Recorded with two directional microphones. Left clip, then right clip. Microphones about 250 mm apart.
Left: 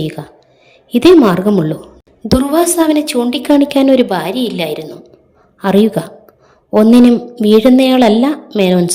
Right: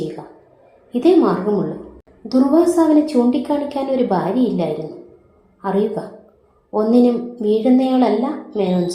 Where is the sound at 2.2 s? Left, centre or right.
Left.